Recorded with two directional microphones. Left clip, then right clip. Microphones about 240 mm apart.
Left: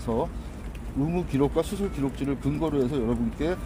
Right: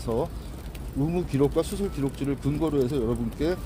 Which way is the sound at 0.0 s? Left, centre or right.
Centre.